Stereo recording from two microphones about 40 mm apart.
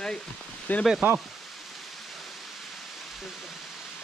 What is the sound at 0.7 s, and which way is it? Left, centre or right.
Speech, left.